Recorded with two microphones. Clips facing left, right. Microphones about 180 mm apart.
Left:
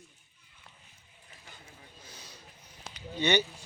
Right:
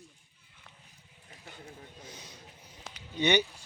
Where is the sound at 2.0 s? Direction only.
20° right (ahead or behind).